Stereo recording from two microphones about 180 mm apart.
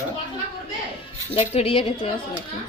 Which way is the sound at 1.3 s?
35° left (ahead or behind).